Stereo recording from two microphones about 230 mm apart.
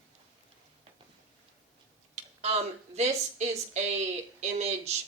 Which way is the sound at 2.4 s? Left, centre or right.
Right.